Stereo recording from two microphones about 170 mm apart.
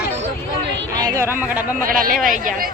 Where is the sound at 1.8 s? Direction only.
55° right (ahead or behind).